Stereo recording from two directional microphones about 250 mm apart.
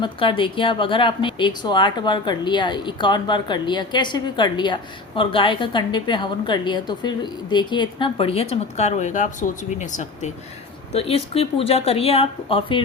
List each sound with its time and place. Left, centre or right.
0.0 s speech: centre